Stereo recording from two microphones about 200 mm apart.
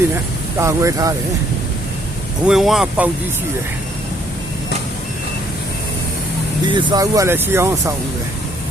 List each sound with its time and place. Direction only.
0.6 s speech: 15° right (ahead or behind)
2.5 s speech: centre (ahead or behind)
6.7 s speech: 25° right (ahead or behind)